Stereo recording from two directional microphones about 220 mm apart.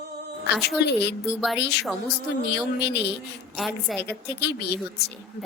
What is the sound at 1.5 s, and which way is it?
A woman's voice, 50° left (ahead or behind).